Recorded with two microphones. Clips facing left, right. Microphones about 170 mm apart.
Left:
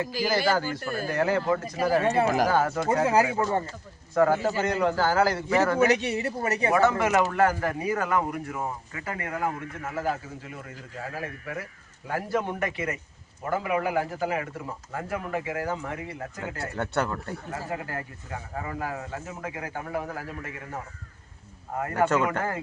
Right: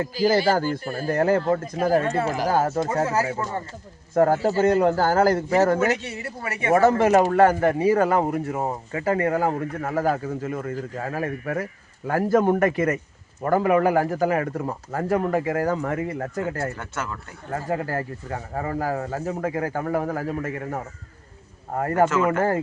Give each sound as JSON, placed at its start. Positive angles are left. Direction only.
{"t": 0.3, "sound": "speech", "side_deg": -50}
{"t": 4.1, "sound": "speech", "side_deg": -45}
{"t": 5.8, "sound": "speech", "side_deg": 20}
{"t": 6.4, "sound": "speech", "side_deg": 40}
{"t": 6.7, "sound": "speech", "side_deg": -40}
{"t": 16.7, "sound": "speech", "side_deg": 35}
{"t": 17.5, "sound": "speech", "side_deg": -40}